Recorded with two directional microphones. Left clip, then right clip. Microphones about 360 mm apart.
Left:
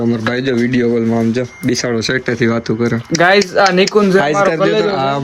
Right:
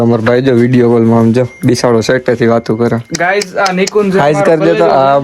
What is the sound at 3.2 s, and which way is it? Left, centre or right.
Speech, centre.